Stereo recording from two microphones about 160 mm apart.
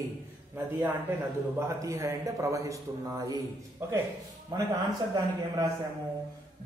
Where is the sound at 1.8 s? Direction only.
20° right (ahead or behind).